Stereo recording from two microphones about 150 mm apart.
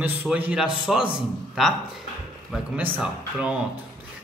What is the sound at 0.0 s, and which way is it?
A man's voice, 10° right (ahead or behind).